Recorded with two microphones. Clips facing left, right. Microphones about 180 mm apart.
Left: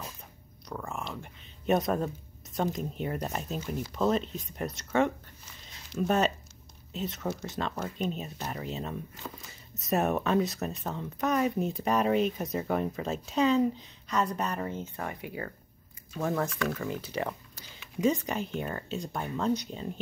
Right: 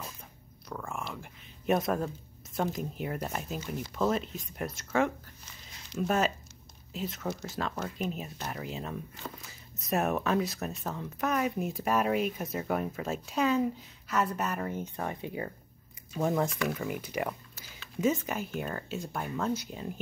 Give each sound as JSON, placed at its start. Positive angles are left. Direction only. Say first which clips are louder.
{"t": 0.7, "sound": "speech", "louder": "left 1 dB", "side_deg": 0}